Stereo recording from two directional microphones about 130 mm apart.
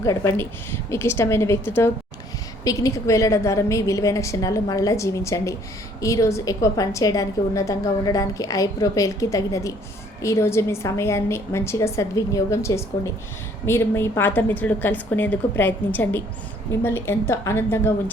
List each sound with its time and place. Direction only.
0.0 s a woman's voice: 25° left (ahead or behind)